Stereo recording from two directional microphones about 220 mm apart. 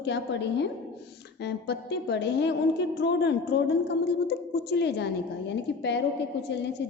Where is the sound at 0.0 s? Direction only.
50° left (ahead or behind).